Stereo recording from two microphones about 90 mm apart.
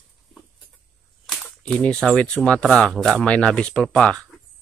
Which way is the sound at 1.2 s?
Centre (ahead or behind).